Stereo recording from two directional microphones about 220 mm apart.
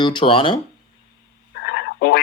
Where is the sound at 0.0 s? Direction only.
20° left (ahead or behind).